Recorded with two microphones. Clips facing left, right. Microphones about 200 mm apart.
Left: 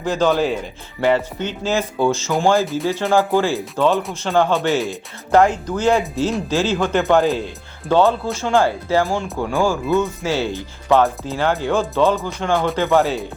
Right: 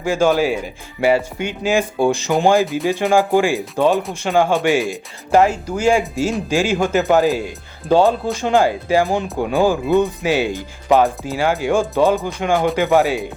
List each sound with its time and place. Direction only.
0.0 s speech: 10° right (ahead or behind)